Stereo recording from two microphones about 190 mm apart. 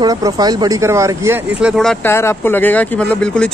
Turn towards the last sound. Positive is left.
turn(degrees=5)  # may be behind; listen again after turning